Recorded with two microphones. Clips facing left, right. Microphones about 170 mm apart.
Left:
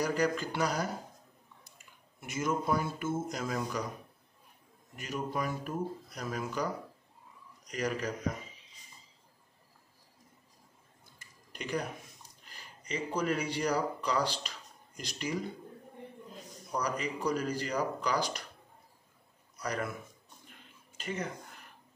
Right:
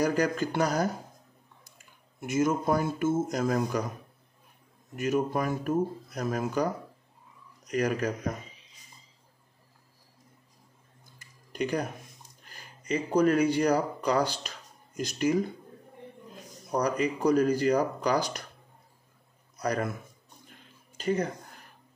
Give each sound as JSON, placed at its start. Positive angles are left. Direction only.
{"t": 0.0, "sound": "speech", "side_deg": -45}
{"t": 2.1, "sound": "speech", "side_deg": -45}
{"t": 5.0, "sound": "speech", "side_deg": -50}
{"t": 7.7, "sound": "speech", "side_deg": -50}
{"t": 11.5, "sound": "speech", "side_deg": -45}
{"t": 16.7, "sound": "speech", "side_deg": -45}
{"t": 19.6, "sound": "a man's voice", "side_deg": -40}
{"t": 21.0, "sound": "speech", "side_deg": -40}